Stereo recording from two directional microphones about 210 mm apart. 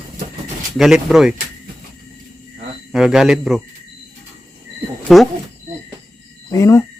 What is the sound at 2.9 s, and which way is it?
Speech, centre (ahead or behind).